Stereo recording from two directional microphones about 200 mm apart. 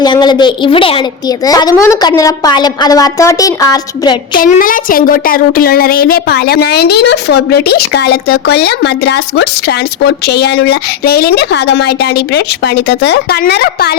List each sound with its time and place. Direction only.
0.0 s a woman's voice: 20° left (ahead or behind)
4.4 s speech: 40° left (ahead or behind)